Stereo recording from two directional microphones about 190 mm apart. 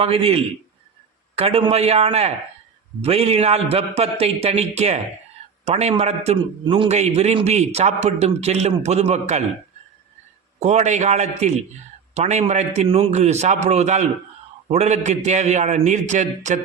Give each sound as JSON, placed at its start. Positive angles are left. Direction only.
{"t": 0.0, "sound": "a man's voice", "side_deg": -30}
{"t": 10.6, "sound": "a man's voice", "side_deg": -40}